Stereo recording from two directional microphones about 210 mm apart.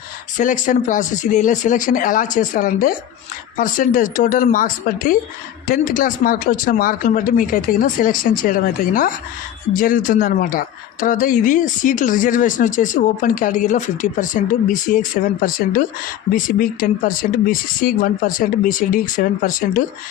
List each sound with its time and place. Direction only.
0.3 s a man's voice: 35° left (ahead or behind)